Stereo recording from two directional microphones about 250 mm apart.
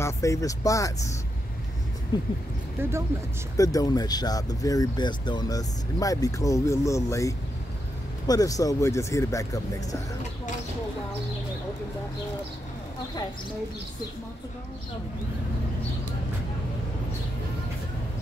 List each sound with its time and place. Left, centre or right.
0.0 s speech: centre
2.8 s speech: centre
3.5 s speech: centre